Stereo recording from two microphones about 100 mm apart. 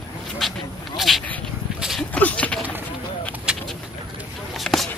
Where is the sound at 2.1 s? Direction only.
15° left (ahead or behind).